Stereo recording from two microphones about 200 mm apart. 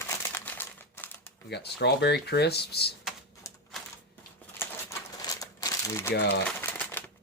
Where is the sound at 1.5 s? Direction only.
55° left (ahead or behind).